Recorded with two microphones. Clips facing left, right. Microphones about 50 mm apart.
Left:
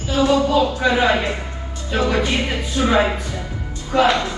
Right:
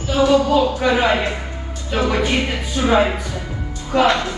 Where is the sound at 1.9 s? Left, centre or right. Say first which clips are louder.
Even; right.